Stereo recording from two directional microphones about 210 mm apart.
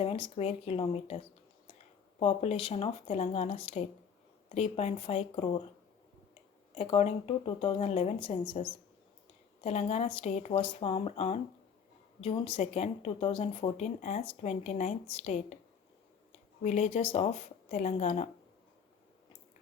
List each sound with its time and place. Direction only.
0.0 s speech: 30° left (ahead or behind)
6.7 s speech: 30° left (ahead or behind)
9.6 s speech: 30° left (ahead or behind)
16.6 s speech: 30° left (ahead or behind)